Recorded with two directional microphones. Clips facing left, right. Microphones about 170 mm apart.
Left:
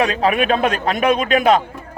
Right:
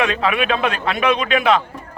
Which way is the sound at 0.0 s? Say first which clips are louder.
Left 2 dB; 40° left (ahead or behind).